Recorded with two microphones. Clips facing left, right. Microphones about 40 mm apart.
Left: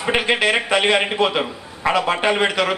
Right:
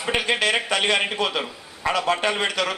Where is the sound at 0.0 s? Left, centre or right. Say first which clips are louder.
Left 4 dB; left.